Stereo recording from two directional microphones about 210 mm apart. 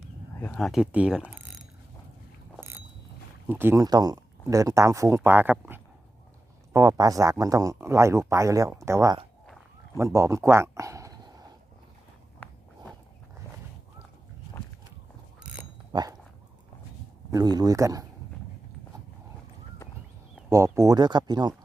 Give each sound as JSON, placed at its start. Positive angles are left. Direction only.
{"t": 0.3, "sound": "speech", "side_deg": 5}
{"t": 3.4, "sound": "speech", "side_deg": -10}
{"t": 10.0, "sound": "a sound", "side_deg": -15}
{"t": 15.5, "sound": "a sound", "side_deg": -5}
{"t": 15.9, "sound": "dog", "side_deg": -20}
{"t": 17.3, "sound": "speech", "side_deg": -20}
{"t": 20.5, "sound": "speech", "side_deg": -15}